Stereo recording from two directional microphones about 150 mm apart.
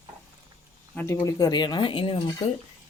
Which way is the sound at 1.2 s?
25° left (ahead or behind).